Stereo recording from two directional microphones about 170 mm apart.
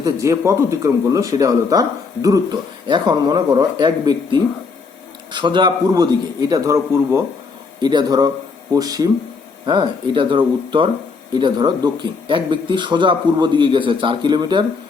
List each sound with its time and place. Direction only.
0.0 s speech: 20° right (ahead or behind)